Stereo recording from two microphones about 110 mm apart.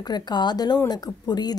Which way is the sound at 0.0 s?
40° left (ahead or behind).